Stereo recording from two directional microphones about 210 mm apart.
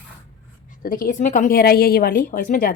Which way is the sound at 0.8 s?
40° left (ahead or behind).